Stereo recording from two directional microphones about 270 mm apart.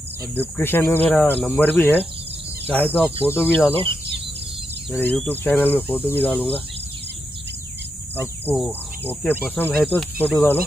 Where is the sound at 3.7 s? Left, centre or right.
Centre.